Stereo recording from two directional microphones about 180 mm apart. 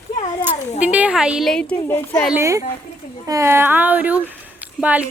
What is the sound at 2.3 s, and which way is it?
Speech, 15° right (ahead or behind).